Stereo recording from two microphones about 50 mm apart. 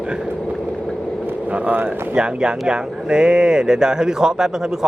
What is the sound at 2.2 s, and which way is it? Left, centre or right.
Speech, centre.